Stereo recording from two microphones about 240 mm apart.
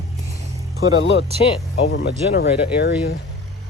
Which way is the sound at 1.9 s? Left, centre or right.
Left.